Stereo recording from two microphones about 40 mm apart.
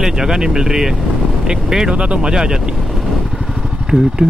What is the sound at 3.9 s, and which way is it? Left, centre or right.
Speech, centre.